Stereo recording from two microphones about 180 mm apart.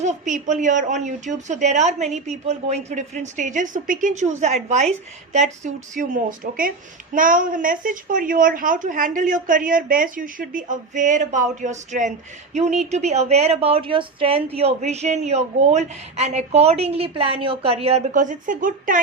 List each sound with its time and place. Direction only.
0.0 s a woman's voice: 40° right (ahead or behind)